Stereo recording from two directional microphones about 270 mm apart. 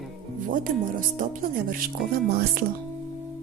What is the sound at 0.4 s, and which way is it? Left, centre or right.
Speech, right.